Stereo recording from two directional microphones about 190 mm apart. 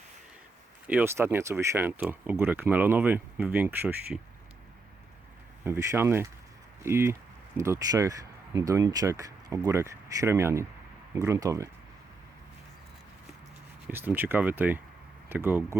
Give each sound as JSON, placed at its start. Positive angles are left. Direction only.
{"t": 0.9, "sound": "speech", "side_deg": -10}
{"t": 5.6, "sound": "speech", "side_deg": -15}
{"t": 13.8, "sound": "speech", "side_deg": -10}